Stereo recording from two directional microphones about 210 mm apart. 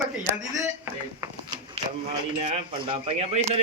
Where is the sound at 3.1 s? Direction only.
25° right (ahead or behind).